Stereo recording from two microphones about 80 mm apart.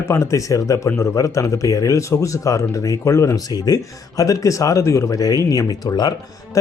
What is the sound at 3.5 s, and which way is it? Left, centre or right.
Speech, left.